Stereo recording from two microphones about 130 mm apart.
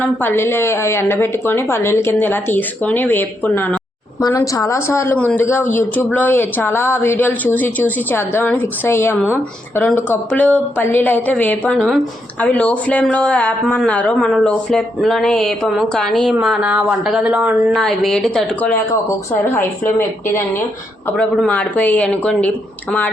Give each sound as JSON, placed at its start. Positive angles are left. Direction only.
{"t": 0.0, "sound": "a woman's voice", "side_deg": 15}
{"t": 4.2, "sound": "a woman's voice", "side_deg": 25}
{"t": 17.7, "sound": "speech", "side_deg": 5}
{"t": 20.0, "sound": "a woman's voice", "side_deg": 20}
{"t": 21.3, "sound": "a woman's voice", "side_deg": 10}